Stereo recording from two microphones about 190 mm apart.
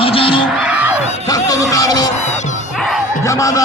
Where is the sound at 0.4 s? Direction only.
5° right (ahead or behind).